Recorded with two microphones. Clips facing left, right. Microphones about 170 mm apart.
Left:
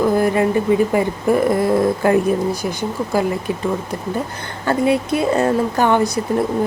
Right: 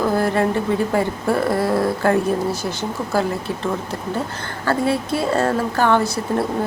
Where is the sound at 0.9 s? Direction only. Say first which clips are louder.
Left 3 dB; 15° left (ahead or behind).